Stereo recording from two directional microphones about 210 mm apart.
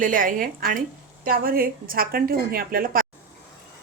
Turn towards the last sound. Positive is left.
turn(degrees=-45)  # may be behind; listen again after turning